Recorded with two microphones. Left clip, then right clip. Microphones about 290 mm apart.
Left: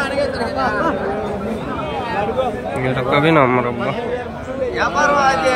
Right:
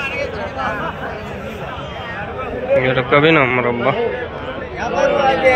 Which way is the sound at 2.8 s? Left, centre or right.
Centre.